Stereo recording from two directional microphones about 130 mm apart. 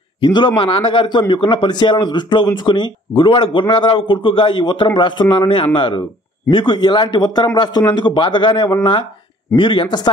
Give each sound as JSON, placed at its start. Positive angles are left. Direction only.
{"t": 0.2, "sound": "speech", "side_deg": 35}